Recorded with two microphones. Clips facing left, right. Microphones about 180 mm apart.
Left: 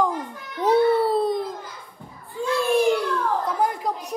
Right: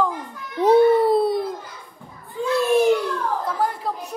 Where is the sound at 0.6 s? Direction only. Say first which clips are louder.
Right 4 dB; 15° right (ahead or behind).